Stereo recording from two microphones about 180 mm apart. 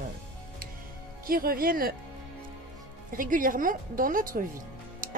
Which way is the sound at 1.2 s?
55° right (ahead or behind).